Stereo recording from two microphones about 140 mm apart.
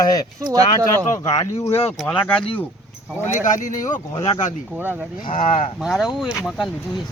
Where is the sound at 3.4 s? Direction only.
65° left (ahead or behind).